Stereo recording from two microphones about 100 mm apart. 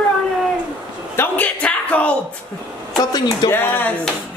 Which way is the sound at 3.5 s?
20° left (ahead or behind).